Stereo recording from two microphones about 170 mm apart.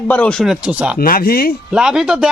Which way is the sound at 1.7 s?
5° right (ahead or behind).